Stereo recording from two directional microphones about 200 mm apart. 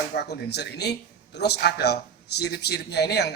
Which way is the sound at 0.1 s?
55° left (ahead or behind).